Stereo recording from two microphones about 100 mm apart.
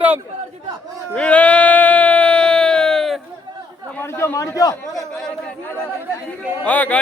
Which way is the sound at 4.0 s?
25° left (ahead or behind).